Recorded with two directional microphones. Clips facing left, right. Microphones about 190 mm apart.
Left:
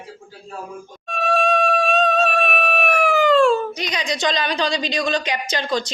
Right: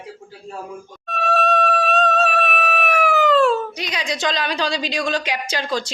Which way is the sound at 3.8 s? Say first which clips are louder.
Left 1 dB; 5° right (ahead or behind).